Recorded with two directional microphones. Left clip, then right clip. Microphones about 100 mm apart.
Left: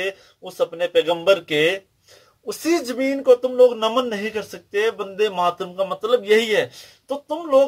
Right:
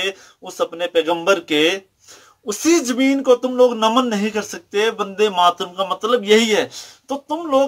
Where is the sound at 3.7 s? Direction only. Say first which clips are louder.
Right 4 dB; 30° right (ahead or behind).